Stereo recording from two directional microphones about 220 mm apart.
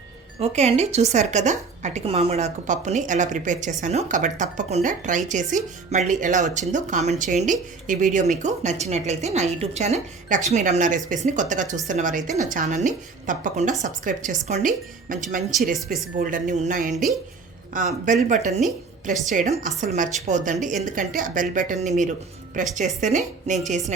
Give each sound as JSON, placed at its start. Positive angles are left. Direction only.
{"t": 0.3, "sound": "speech", "side_deg": -30}
{"t": 16.9, "sound": "speech", "side_deg": 0}
{"t": 17.7, "sound": "speech", "side_deg": -35}